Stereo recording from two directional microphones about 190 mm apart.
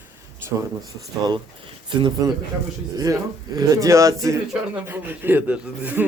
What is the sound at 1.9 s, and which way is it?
Speech, 25° right (ahead or behind).